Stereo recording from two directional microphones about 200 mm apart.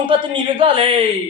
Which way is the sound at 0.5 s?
30° right (ahead or behind).